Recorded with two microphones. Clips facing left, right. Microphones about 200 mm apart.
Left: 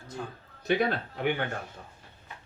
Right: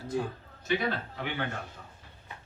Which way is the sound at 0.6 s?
50° left (ahead or behind).